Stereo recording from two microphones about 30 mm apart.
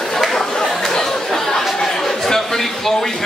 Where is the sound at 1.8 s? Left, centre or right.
Centre.